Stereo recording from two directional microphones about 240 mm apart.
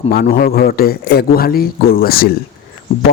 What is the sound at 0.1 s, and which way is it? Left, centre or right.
Speech, left.